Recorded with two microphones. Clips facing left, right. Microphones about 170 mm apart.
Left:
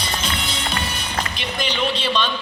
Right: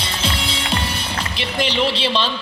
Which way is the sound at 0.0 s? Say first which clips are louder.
Right 2 dB; 30° right (ahead or behind).